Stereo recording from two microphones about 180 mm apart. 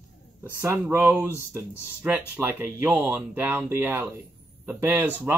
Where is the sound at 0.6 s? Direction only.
10° right (ahead or behind).